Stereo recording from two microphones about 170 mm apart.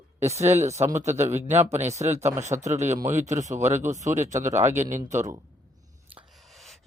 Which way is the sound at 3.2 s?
45° right (ahead or behind).